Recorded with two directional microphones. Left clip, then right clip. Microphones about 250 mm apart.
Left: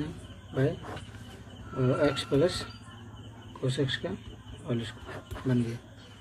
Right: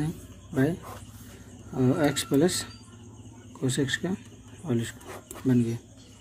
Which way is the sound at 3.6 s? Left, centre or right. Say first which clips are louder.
Right 3 dB; right.